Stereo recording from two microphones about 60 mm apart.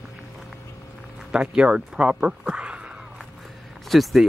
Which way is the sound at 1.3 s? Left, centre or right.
Centre.